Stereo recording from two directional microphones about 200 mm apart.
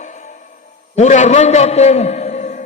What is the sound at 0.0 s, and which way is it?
Music, 35° left (ahead or behind).